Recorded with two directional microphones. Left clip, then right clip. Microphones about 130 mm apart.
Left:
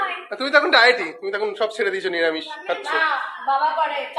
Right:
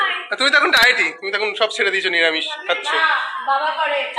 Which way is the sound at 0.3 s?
20° left (ahead or behind).